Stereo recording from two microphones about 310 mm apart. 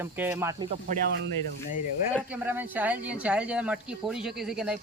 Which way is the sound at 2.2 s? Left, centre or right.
Centre.